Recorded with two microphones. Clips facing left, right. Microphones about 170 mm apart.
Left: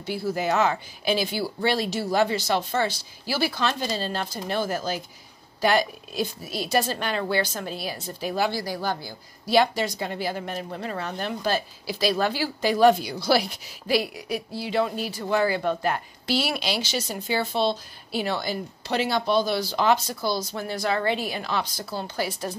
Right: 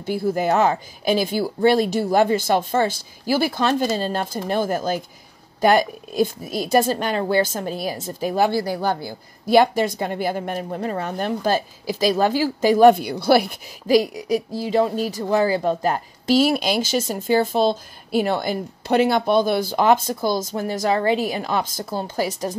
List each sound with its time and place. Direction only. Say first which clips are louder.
0.0 s speech: right 5 dB; 50° right (ahead or behind)
13.8 s speech: right 8 dB; 40° right (ahead or behind)